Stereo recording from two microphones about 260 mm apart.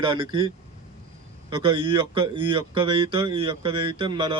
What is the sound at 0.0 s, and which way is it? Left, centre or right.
Speech, centre.